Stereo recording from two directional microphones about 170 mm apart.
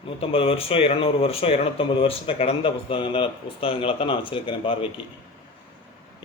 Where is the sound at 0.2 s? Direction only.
35° left (ahead or behind).